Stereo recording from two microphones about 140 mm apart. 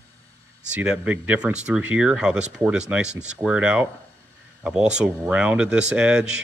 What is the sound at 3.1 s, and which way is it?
Speech, 55° right (ahead or behind).